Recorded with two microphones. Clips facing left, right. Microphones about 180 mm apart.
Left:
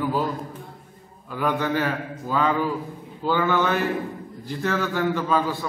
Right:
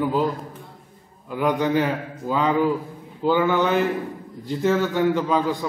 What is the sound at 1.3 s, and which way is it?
A man's voice, 15° right (ahead or behind).